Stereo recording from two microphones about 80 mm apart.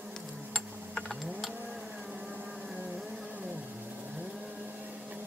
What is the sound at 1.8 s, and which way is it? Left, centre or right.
Vehicle, centre.